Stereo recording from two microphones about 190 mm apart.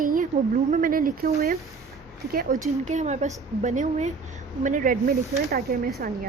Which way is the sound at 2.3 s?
45° right (ahead or behind).